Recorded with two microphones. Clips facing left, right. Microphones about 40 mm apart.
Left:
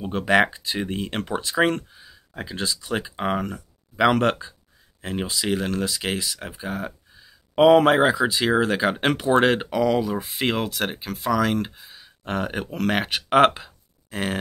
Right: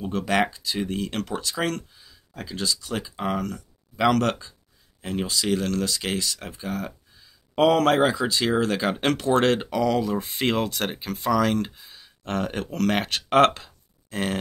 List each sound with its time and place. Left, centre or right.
0.1 s speech: left; by 14.4 s centre